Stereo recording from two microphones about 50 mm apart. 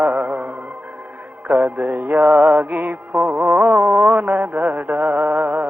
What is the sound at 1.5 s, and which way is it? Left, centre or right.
Music, right.